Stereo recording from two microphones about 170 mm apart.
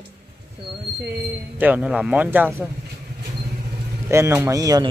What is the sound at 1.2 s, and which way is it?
Speech, 10° right (ahead or behind).